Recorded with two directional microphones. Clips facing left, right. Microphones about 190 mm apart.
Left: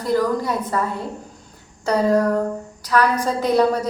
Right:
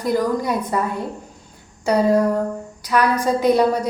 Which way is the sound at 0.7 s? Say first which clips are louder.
Right 1 dB; 15° right (ahead or behind).